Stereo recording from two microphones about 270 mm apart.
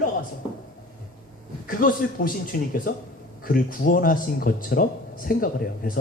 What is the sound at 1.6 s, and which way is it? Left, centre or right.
Speech, left.